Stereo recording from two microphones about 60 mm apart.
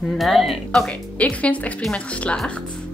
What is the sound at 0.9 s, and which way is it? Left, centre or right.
Speech, left.